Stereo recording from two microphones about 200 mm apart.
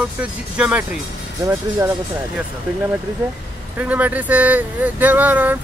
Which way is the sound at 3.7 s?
5° right (ahead or behind).